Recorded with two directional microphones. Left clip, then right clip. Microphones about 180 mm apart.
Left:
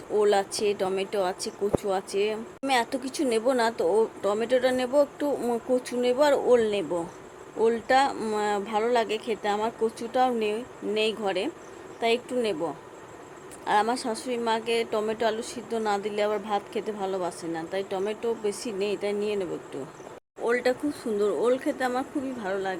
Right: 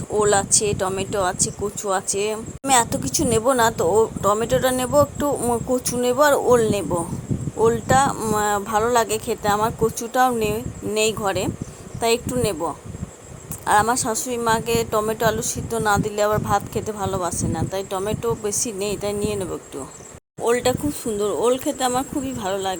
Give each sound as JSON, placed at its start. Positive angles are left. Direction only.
{"t": 0.1, "sound": "speech", "side_deg": -20}